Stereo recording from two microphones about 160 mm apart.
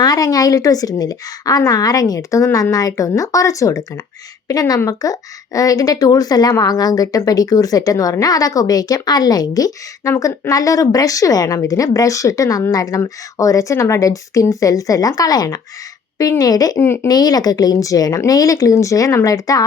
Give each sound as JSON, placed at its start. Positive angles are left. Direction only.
{"t": 0.0, "sound": "a woman's voice", "side_deg": 25}